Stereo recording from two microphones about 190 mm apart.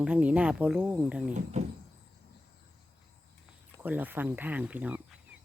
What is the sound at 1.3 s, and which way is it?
Speech, 35° right (ahead or behind).